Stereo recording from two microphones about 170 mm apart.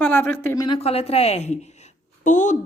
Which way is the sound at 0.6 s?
35° left (ahead or behind).